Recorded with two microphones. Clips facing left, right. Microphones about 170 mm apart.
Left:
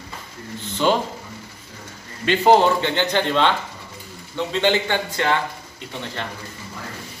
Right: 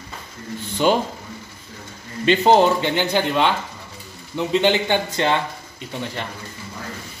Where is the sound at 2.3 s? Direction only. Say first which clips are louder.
Right 1 dB; 20° right (ahead or behind).